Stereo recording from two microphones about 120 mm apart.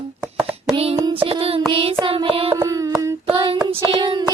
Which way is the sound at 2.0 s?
45° right (ahead or behind).